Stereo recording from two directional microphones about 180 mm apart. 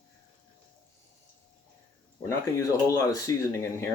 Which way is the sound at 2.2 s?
15° left (ahead or behind).